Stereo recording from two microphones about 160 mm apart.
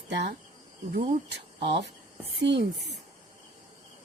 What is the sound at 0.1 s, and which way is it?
Speech, 90° right.